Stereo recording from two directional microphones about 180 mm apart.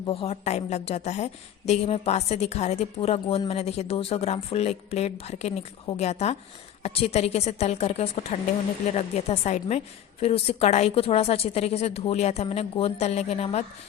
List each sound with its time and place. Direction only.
0.0 s a woman's voice: 30° left (ahead or behind)